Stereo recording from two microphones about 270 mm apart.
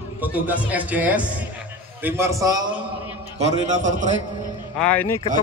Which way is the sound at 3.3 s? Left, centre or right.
Right.